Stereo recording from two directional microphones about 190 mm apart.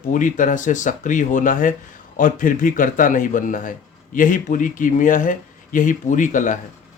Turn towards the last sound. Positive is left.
turn(degrees=40)  # may be behind; listen again after turning